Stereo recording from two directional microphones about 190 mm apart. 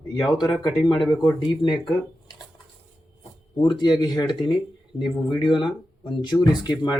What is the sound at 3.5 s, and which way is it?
Speech, 25° left (ahead or behind).